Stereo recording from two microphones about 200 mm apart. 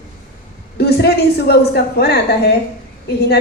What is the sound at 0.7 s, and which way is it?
A woman's voice, 55° left (ahead or behind).